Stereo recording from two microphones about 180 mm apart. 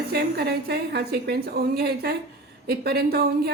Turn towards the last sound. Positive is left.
turn(degrees=-60)  # may be behind; listen again after turning